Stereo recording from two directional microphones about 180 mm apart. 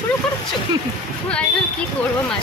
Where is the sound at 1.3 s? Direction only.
5° left (ahead or behind).